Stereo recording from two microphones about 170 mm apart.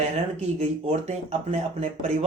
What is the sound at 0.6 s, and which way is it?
Speech, 40° right (ahead or behind).